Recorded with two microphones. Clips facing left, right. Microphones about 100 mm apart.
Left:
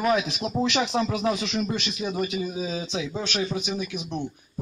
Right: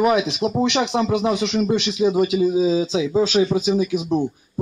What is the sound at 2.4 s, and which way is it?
A man's voice, 25° right (ahead or behind).